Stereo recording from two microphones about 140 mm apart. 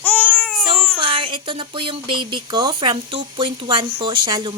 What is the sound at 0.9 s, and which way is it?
Speech, 40° right (ahead or behind).